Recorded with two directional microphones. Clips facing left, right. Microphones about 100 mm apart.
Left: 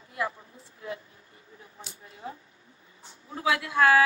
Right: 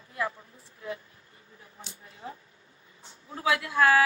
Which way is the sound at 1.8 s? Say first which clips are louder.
Left 2 dB; 25° left (ahead or behind).